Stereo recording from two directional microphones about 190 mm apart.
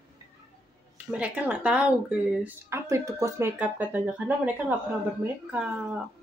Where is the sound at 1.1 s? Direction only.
10° right (ahead or behind).